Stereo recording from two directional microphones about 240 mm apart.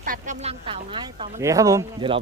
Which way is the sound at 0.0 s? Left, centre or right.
Right.